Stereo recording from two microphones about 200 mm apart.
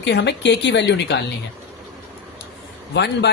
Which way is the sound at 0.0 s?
60° left (ahead or behind).